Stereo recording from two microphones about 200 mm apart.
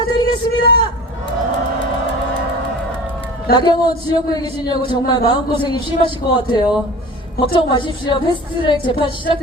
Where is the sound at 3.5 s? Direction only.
20° left (ahead or behind).